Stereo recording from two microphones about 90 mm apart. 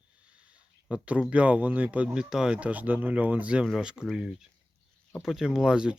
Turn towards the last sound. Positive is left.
turn(degrees=-10)  # may be behind; listen again after turning